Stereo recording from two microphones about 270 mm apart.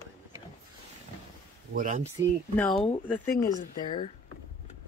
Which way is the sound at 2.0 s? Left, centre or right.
Centre.